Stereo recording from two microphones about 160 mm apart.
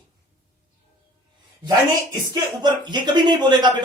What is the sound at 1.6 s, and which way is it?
Speech, 25° right (ahead or behind).